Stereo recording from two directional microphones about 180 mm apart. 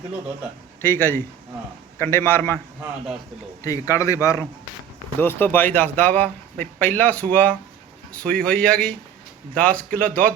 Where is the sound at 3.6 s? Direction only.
20° left (ahead or behind).